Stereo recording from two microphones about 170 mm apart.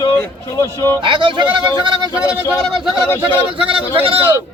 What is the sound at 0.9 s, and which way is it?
Speech, 30° right (ahead or behind).